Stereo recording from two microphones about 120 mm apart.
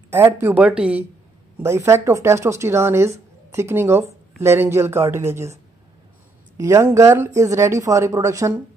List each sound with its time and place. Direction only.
0.1 s a woman's voice: 20° right (ahead or behind)
1.6 s speech: 25° right (ahead or behind)